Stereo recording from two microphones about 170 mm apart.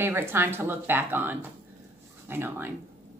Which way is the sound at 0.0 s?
15° right (ahead or behind).